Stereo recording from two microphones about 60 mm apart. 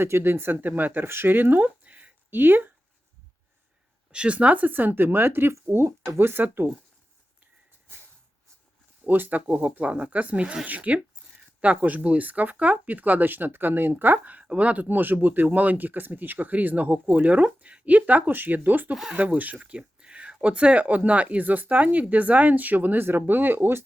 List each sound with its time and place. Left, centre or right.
0.0 s speech: right
4.1 s speech: centre; by 6.7 s right
9.0 s speech: right